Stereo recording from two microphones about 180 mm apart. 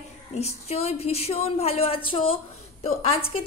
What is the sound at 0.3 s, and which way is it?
A woman's voice, 35° left (ahead or behind).